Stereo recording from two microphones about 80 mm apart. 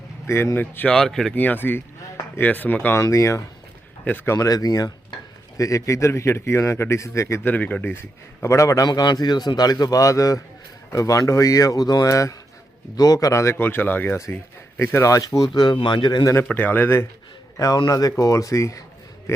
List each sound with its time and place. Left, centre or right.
0.3 s speech: left
0.9 s speech: centre
1.4 s speech: left
3.0 s a man's voice: left
4.4 s a man's voice: left
7.4 s speech: centre
8.4 s a man's voice: left
8.9 s a man's voice: left
12.0 s a man's voice: left
14.8 s a man's voice: left
15.6 s speech: left
16.5 s speech: left
17.7 s a man's voice: left